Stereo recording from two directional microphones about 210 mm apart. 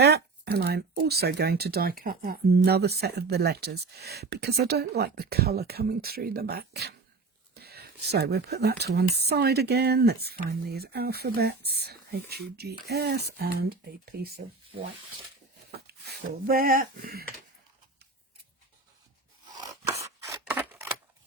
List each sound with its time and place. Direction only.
0.0 s speech: 50° right (ahead or behind)
15.9 s speech: 50° right (ahead or behind)
19.6 s scissors: 15° right (ahead or behind)